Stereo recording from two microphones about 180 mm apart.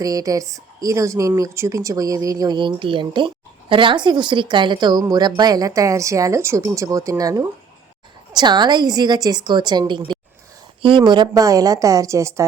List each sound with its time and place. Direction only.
0.0 s speech: 20° right (ahead or behind)